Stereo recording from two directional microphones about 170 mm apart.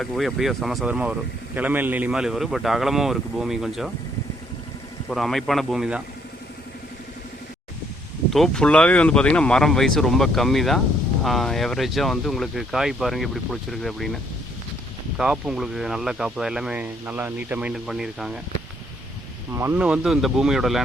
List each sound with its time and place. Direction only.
0.0 s speech: centre (ahead or behind)
5.0 s speech: centre (ahead or behind)
8.3 s speech: 5° left (ahead or behind)
15.2 s speech: 5° right (ahead or behind)
19.5 s speech: 15° right (ahead or behind)